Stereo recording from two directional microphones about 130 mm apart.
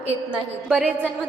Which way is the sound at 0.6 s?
10° right (ahead or behind).